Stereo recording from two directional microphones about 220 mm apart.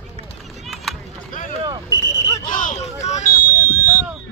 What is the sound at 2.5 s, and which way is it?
Hubbub, 35° left (ahead or behind).